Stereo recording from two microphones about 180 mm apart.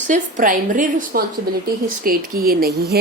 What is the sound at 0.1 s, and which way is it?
Speech, 45° right (ahead or behind).